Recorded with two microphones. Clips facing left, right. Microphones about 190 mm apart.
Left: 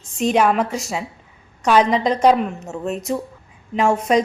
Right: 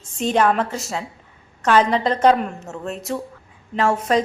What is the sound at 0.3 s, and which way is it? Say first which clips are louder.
A woman's voice: even; 10° left (ahead or behind).